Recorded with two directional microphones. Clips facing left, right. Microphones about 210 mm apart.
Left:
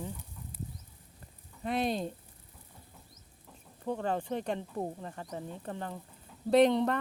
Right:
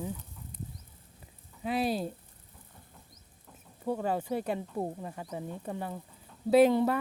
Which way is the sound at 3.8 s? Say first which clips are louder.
Right 2 dB; 10° right (ahead or behind).